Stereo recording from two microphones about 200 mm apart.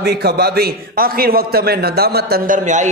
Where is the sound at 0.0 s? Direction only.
55° right (ahead or behind).